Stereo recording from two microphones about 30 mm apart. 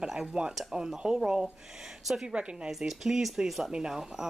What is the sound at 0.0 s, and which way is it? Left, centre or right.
Speech, centre.